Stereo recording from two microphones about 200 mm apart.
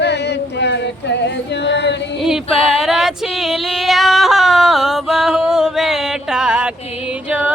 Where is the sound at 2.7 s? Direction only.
Centre (ahead or behind).